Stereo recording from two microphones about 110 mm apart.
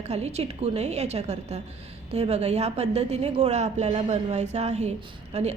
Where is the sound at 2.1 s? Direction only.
75° right (ahead or behind).